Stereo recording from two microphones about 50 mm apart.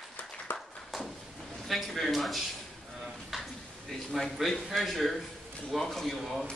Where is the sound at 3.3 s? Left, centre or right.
Centre.